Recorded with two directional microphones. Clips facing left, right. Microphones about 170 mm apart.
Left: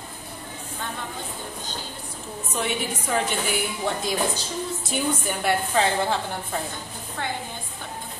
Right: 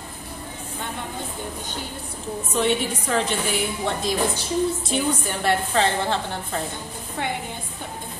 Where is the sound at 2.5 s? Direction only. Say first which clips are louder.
Right 5 dB; 5° left (ahead or behind).